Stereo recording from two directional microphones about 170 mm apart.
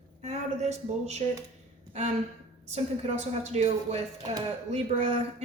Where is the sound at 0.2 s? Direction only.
40° right (ahead or behind).